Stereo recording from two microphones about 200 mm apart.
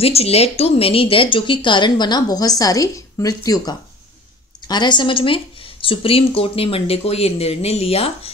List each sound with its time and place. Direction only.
0.0 s speech: 30° left (ahead or behind)